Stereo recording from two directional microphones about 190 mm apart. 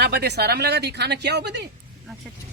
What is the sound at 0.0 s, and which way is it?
A woman's voice, 60° right (ahead or behind).